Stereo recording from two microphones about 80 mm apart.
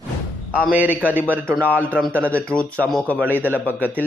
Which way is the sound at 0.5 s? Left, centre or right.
Centre.